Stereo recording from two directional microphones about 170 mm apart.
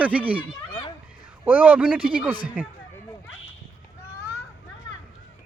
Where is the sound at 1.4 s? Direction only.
10° right (ahead or behind).